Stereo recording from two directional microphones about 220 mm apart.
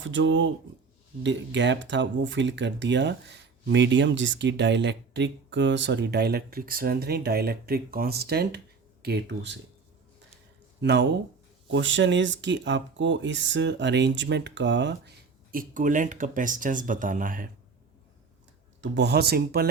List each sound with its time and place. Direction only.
0.0 s speech: 60° right (ahead or behind)
10.8 s speech: 50° right (ahead or behind)
15.5 s speech: 35° right (ahead or behind)
18.8 s speech: 50° right (ahead or behind)